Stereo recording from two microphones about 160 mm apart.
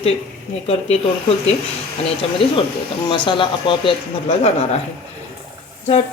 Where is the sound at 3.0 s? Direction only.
30° left (ahead or behind).